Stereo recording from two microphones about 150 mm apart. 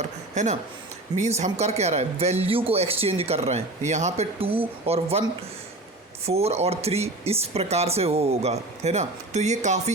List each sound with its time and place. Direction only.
0.4 s speech: 50° right (ahead or behind)
6.2 s speech: 45° right (ahead or behind)